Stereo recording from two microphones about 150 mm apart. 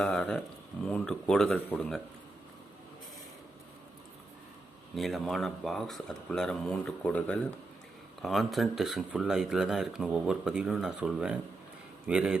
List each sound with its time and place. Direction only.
0.0 s speech: 5° left (ahead or behind)
4.9 s a man's voice: centre (ahead or behind)